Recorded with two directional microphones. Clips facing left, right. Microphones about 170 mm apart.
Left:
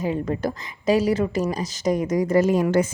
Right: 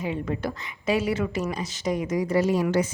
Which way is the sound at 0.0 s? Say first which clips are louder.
Left 4 dB; 40° left (ahead or behind).